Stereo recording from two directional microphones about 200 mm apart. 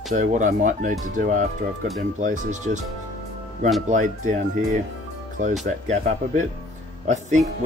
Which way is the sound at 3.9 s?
40° right (ahead or behind).